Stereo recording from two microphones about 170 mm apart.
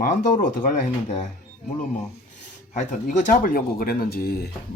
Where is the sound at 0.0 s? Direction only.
50° left (ahead or behind).